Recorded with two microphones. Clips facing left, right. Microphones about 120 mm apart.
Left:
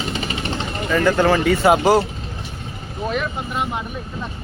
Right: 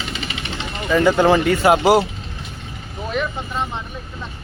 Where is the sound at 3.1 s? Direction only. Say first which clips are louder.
Even; 5° left (ahead or behind).